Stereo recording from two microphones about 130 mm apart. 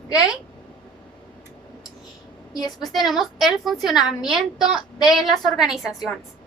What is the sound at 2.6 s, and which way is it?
Speech, 30° left (ahead or behind).